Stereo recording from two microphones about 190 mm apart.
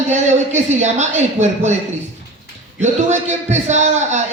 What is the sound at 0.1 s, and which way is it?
Speech, 35° right (ahead or behind).